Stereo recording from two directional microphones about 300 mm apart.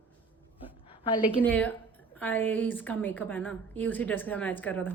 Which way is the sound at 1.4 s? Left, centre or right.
Centre.